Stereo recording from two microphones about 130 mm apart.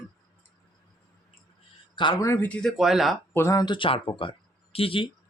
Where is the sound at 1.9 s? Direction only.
35° left (ahead or behind).